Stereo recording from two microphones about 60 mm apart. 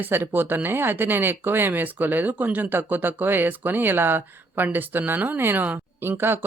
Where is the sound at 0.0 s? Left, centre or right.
Right.